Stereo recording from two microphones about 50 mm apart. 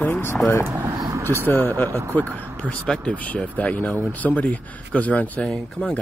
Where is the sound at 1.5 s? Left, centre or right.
Left.